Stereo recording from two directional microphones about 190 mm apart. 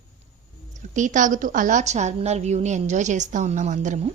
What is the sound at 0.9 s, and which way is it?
A woman's voice, 40° right (ahead or behind).